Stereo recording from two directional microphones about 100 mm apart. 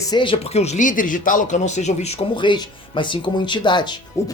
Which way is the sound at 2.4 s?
50° left (ahead or behind).